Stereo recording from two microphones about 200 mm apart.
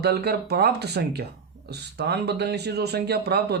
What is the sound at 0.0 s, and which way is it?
Speech, 55° right (ahead or behind).